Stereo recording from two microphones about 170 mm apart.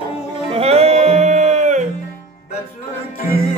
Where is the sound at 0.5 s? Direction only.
35° right (ahead or behind).